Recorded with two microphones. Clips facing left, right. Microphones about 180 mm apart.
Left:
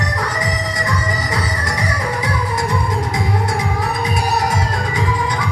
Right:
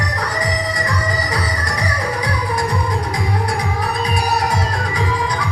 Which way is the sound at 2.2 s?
25° left (ahead or behind).